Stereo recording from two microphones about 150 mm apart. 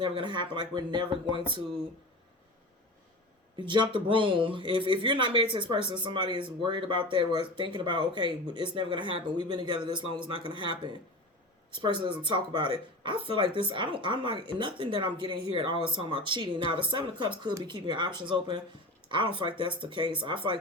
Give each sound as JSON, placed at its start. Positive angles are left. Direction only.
{"t": 0.0, "sound": "speech", "side_deg": -30}
{"t": 3.7, "sound": "speech", "side_deg": -35}